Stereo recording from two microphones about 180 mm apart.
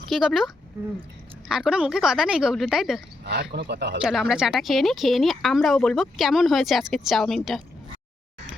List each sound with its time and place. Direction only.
0.1 s a woman's voice: centre (ahead or behind)
3.2 s speech: 65° right (ahead or behind)
4.0 s a woman's voice: 5° right (ahead or behind)